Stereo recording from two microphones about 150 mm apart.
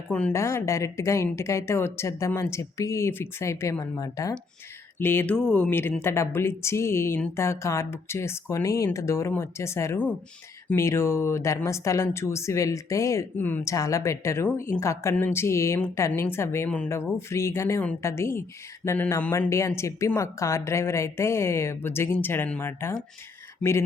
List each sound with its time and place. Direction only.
0.1 s a woman's voice: 10° left (ahead or behind)
0.3 s a woman's voice: 20° left (ahead or behind)